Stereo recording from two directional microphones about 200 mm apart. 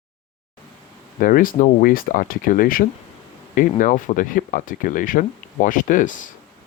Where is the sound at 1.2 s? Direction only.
45° left (ahead or behind).